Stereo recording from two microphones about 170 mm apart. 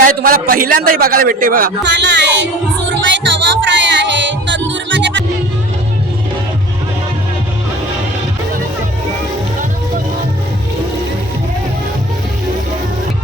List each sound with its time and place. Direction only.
0.0 s a man's voice: 55° right (ahead or behind); by 2.5 s 90° right
3.0 s music: 90° right